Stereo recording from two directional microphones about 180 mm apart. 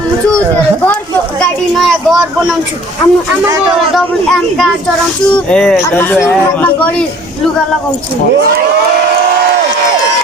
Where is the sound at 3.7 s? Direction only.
Centre (ahead or behind).